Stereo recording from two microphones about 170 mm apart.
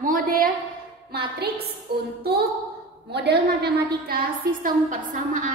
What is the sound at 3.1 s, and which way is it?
Speech, 80° right.